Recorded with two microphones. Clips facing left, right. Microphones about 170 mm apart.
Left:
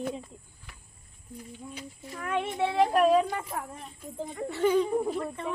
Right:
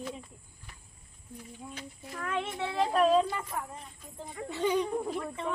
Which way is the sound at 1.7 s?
10° left (ahead or behind).